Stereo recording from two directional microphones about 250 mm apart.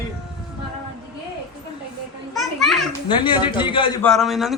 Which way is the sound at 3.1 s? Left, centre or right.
Centre.